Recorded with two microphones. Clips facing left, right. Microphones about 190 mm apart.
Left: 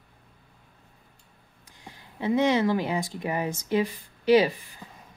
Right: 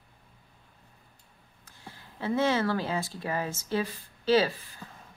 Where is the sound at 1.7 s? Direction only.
15° left (ahead or behind).